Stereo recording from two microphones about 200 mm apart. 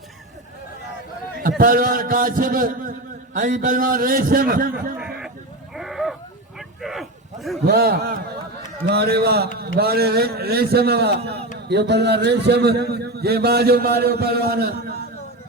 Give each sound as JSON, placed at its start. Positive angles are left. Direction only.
{"t": 1.4, "sound": "a man's voice", "side_deg": -45}
{"t": 5.7, "sound": "sheep", "side_deg": 0}
{"t": 6.6, "sound": "a sound", "side_deg": 0}
{"t": 7.7, "sound": "a man's voice", "side_deg": -50}